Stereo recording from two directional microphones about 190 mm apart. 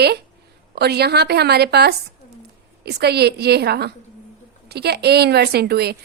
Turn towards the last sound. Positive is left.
turn(degrees=-55)  # may be behind; listen again after turning